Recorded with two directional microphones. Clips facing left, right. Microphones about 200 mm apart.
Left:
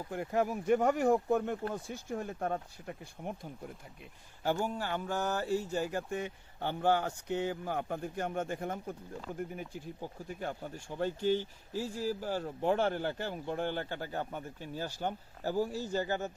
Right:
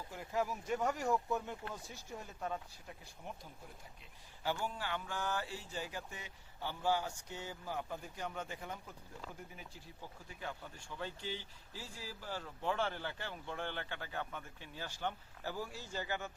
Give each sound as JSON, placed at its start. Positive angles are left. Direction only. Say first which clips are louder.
{"t": 0.1, "sound": "speech", "louder": "left 6 dB", "side_deg": 55}
{"t": 4.4, "sound": "speech", "louder": "left 7 dB", "side_deg": 45}